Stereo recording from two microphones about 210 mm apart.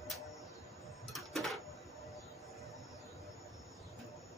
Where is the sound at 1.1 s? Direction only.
Centre (ahead or behind).